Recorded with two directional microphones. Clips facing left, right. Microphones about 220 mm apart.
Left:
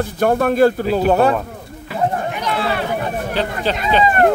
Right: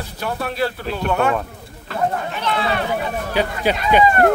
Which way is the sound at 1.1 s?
35° left (ahead or behind).